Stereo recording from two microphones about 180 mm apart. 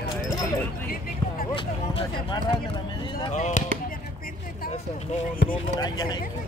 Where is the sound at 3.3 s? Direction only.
40° left (ahead or behind).